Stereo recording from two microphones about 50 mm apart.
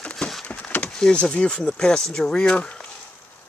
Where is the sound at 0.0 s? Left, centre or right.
Centre.